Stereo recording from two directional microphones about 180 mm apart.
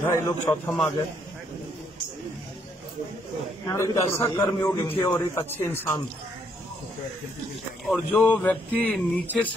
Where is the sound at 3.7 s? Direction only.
15° left (ahead or behind).